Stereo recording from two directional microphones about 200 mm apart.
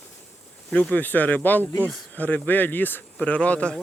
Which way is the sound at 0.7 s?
5° left (ahead or behind).